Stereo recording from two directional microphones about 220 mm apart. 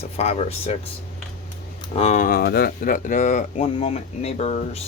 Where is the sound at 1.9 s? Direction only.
30° left (ahead or behind).